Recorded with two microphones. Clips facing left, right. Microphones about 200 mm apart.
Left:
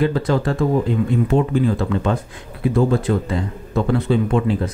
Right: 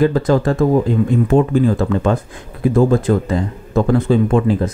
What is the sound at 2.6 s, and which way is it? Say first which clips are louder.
Speech: right 4 dB; 45° right (ahead or behind).